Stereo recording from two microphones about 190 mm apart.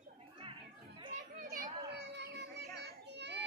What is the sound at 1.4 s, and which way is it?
Children playing, 50° right (ahead or behind).